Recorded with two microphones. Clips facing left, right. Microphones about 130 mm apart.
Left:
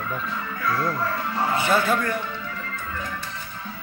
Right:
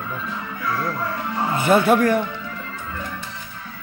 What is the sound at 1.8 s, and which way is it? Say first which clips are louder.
Speech: right 7 dB; 70° right (ahead or behind).